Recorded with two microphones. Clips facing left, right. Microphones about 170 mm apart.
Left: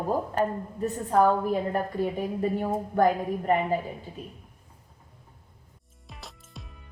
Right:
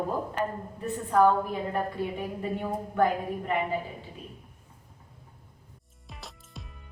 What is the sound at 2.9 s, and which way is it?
Speech, 40° left (ahead or behind).